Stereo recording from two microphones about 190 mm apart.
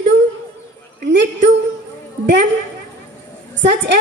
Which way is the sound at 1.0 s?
65° right (ahead or behind).